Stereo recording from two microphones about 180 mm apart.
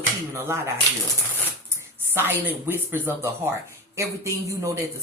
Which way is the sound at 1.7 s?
10° right (ahead or behind).